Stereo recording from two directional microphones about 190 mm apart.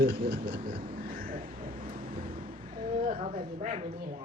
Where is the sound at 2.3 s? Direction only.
40° right (ahead or behind).